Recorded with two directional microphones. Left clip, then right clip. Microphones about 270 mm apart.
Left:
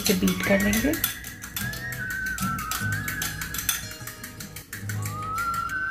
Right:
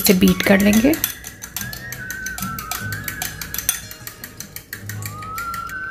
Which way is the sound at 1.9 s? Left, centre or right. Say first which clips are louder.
Right 1 dB; centre.